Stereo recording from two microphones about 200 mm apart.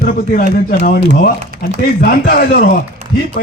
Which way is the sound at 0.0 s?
45° left (ahead or behind).